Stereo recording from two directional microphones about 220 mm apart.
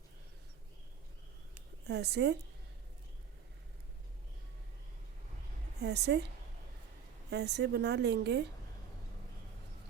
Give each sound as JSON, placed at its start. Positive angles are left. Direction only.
{"t": 1.9, "sound": "a woman's voice", "side_deg": -50}
{"t": 5.8, "sound": "a woman's voice", "side_deg": -50}
{"t": 7.3, "sound": "a woman's voice", "side_deg": -50}